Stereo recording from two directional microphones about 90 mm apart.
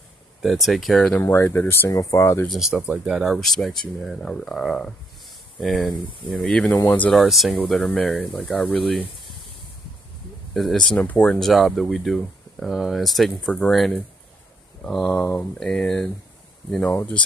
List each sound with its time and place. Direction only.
0.4 s speech: centre (ahead or behind)
1.2 s speech: 25° left (ahead or behind)
2.4 s speech: centre (ahead or behind)
2.7 s speech: 10° right (ahead or behind); by 6.8 s 10° left (ahead or behind)
7.1 s speech: centre (ahead or behind)
10.5 s speech: centre (ahead or behind)
16.9 s speech: 20° left (ahead or behind)